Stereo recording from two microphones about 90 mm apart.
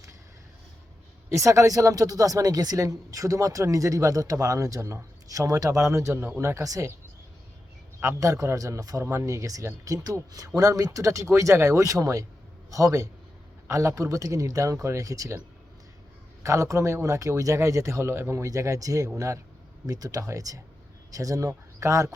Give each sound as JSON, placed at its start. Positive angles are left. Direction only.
{"t": 1.3, "sound": "speech", "side_deg": -35}
{"t": 8.0, "sound": "speech", "side_deg": -35}
{"t": 16.4, "sound": "speech", "side_deg": -35}